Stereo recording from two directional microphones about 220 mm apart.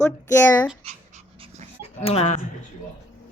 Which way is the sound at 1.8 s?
25° left (ahead or behind).